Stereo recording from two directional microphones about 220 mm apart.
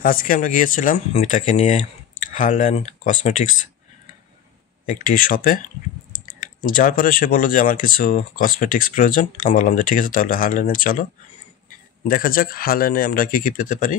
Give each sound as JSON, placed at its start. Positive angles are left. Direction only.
{"t": 0.0, "sound": "speech", "side_deg": 40}
{"t": 4.8, "sound": "speech", "side_deg": 40}